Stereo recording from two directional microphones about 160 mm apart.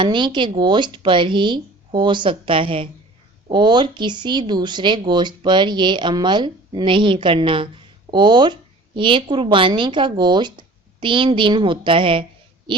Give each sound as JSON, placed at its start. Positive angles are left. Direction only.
{"t": 0.0, "sound": "speech", "side_deg": -30}